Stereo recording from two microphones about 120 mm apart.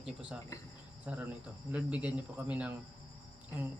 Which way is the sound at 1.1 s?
15° right (ahead or behind).